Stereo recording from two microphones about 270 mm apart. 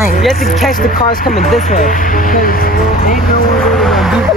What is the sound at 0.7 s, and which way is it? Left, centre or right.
Speech, left.